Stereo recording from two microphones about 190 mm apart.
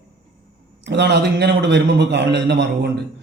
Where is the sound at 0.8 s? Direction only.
65° right (ahead or behind).